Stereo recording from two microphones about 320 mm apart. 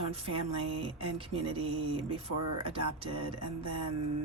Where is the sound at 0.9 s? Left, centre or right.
Centre.